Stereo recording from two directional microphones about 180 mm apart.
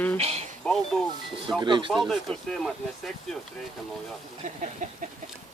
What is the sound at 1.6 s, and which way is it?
Speech, 25° right (ahead or behind).